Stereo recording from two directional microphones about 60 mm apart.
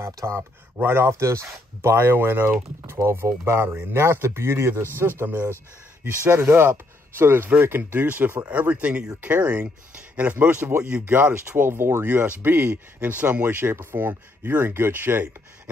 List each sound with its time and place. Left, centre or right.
0.7 s speech: right
7.4 s speech: right
12.6 s speech: right
13.6 s speech: right